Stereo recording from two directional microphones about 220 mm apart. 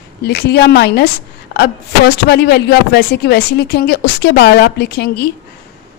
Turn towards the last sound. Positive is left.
turn(degrees=45)  # may be behind; listen again after turning